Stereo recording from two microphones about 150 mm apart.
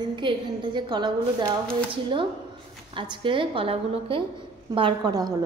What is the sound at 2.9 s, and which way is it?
A woman's voice, 35° right (ahead or behind).